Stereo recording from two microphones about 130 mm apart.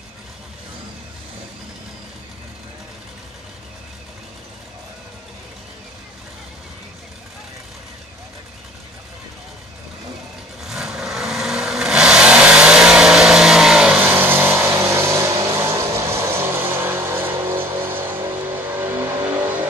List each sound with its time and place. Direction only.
10.6 s vehicle: 5° right (ahead or behind)